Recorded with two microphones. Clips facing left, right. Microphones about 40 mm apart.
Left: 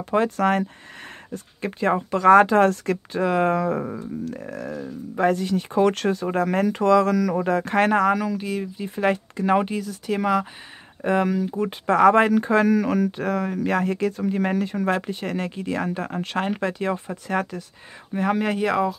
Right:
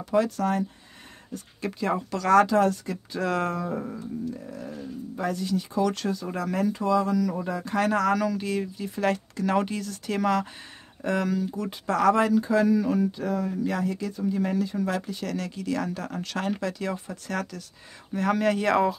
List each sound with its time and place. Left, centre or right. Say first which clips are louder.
0.4 s speech: left 5 dB; left
1.3 s speech: left 2 dB; left
2.5 s speech: left 5 dB; left
3.2 s speech: left 5 dB; centre
4.2 s a sound: left 3 dB; left
5.1 s speech: left 7 dB; left
7.9 s speech: left 4 dB; left
8.7 s speech: left 4 dB; left
11.0 s speech: left 5 dB; left
18.7 s speech: right 1 dB; centre